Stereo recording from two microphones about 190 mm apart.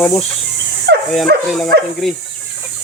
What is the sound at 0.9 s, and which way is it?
Dog, 60° right (ahead or behind).